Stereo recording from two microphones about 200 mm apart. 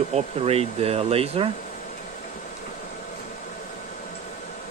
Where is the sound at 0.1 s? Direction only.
30° right (ahead or behind).